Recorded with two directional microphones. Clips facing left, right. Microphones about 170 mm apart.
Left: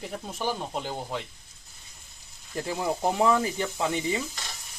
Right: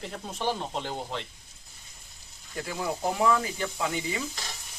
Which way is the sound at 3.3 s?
25° left (ahead or behind).